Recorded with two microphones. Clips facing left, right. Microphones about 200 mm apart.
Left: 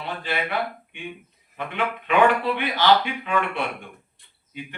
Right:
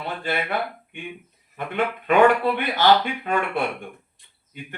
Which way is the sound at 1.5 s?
45° right (ahead or behind).